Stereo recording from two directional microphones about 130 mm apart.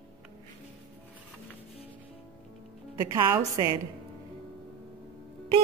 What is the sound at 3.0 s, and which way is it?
Speech, 30° right (ahead or behind).